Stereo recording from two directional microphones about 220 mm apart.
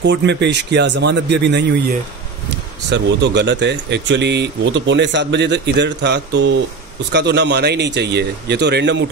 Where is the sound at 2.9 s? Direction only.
55° right (ahead or behind).